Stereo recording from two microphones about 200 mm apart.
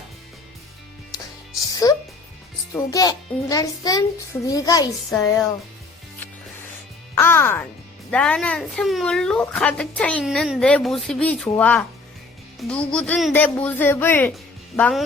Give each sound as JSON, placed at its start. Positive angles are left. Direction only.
{"t": 1.7, "sound": "music", "side_deg": 20}
{"t": 2.7, "sound": "speech", "side_deg": 20}
{"t": 7.2, "sound": "a woman's voice", "side_deg": 10}